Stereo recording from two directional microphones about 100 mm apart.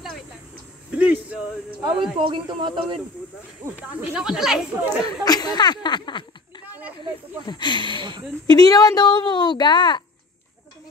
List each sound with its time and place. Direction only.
0.9 s a sound: 15° right (ahead or behind)
1.8 s speech: 55° right (ahead or behind)
3.7 s speech: 10° right (ahead or behind)
5.2 s speech: 40° left (ahead or behind)
7.4 s speech: 50° left (ahead or behind)
8.5 s speech: 40° left (ahead or behind)